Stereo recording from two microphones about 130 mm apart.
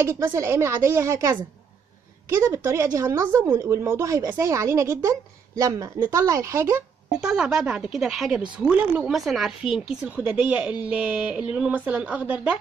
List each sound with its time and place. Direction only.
0.0 s a woman's voice: 20° right (ahead or behind)
7.1 s a woman's voice: 5° right (ahead or behind)